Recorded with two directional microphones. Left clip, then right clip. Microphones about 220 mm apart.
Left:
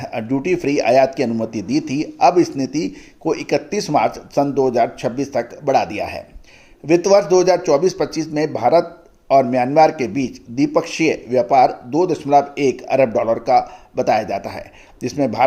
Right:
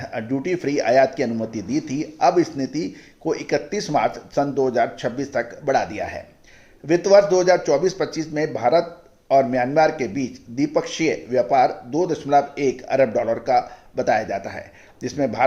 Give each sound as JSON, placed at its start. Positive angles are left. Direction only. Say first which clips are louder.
{"t": 0.0, "sound": "a man's voice", "louder": "left 4 dB", "side_deg": 30}
{"t": 15.0, "sound": "a man's voice", "louder": "left 4 dB", "side_deg": 30}